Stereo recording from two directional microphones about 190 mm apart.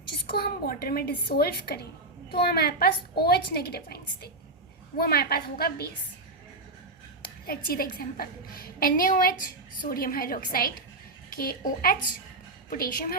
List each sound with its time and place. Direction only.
0.3 s a woman's voice: 55° left (ahead or behind)
7.4 s a woman's voice: 50° left (ahead or behind)